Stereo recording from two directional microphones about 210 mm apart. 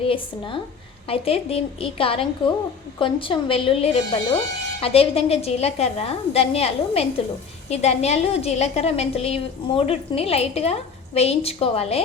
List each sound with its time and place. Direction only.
0.0 s a woman's voice: 25° left (ahead or behind)